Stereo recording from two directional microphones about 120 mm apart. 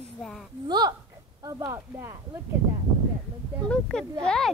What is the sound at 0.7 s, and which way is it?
Speech, 35° right (ahead or behind).